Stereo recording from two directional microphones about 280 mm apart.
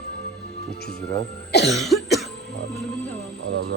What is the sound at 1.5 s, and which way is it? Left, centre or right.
Cough, left.